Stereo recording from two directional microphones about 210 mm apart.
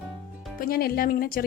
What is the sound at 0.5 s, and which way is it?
Speech, 45° left (ahead or behind).